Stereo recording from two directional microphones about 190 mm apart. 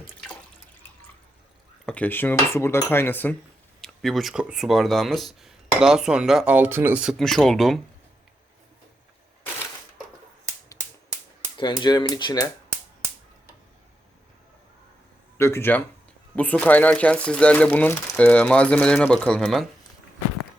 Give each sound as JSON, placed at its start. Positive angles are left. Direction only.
{"t": 1.9, "sound": "speech", "side_deg": 10}
{"t": 11.5, "sound": "speech", "side_deg": 25}
{"t": 15.4, "sound": "speech", "side_deg": 15}